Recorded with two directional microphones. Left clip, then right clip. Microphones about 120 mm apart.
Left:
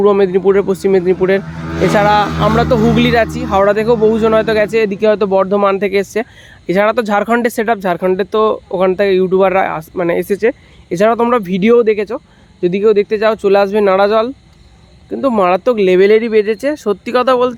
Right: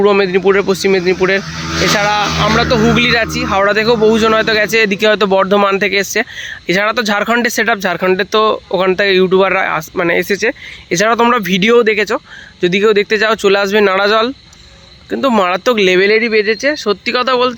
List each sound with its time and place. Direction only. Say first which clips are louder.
0.0 s speech: even; 20° left (ahead or behind)
3.6 s speech: even; 15° left (ahead or behind)
4.9 s speech: right 1 dB; centre (ahead or behind)
5.9 s speech: right 1 dB; 15° left (ahead or behind); by 16.0 s centre (ahead or behind)
16.0 s speech: left 1 dB; 25° left (ahead or behind)